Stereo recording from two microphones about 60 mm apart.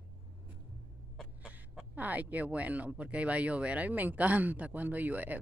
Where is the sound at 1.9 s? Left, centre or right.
Right.